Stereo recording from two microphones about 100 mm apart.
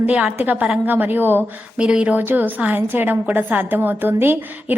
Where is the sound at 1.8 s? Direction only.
10° right (ahead or behind).